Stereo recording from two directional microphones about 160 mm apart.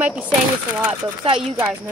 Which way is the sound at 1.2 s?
35° right (ahead or behind).